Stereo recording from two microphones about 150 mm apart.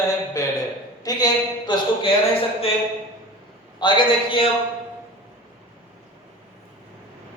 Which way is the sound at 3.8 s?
30° left (ahead or behind).